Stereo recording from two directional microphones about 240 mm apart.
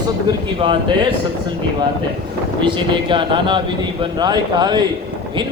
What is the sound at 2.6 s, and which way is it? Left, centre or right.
A man's voice, centre.